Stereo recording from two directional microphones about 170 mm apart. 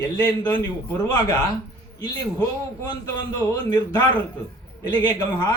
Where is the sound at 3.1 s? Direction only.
15° left (ahead or behind).